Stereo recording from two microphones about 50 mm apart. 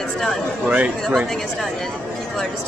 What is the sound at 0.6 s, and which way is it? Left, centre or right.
Speech, right.